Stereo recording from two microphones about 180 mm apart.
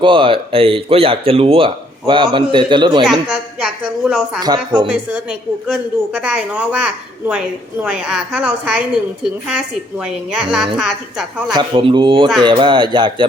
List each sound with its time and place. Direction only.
0.0 s speech: 30° right (ahead or behind)
3.0 s a woman's voice: 5° right (ahead or behind)
4.4 s speech: 20° right (ahead or behind)
4.9 s a woman's voice: 5° right (ahead or behind)
11.5 s speech: 30° right (ahead or behind)